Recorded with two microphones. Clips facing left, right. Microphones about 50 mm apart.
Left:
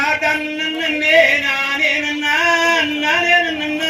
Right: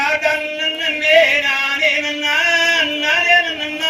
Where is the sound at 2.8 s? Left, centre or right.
Right.